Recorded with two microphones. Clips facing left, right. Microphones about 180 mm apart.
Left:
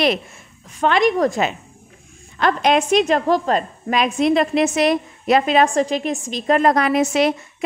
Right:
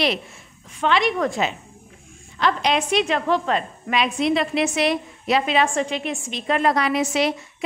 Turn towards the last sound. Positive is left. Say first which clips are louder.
# left 4 dB
turn(degrees=50)  # may be behind; listen again after turning